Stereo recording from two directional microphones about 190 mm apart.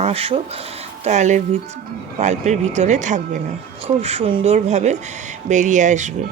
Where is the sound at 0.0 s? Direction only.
30° right (ahead or behind).